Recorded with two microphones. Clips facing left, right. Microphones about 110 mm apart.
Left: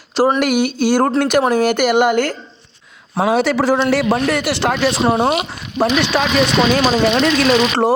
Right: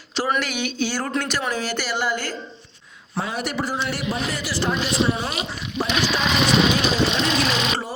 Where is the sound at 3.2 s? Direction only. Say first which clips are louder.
Left 11 dB; 85° left.